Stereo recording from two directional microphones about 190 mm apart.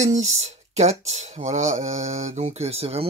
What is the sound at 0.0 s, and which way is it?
Speech, 40° right (ahead or behind).